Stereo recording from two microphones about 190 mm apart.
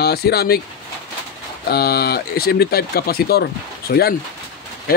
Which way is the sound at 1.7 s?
55° left (ahead or behind).